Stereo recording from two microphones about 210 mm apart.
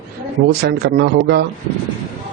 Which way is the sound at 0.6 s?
50° right (ahead or behind).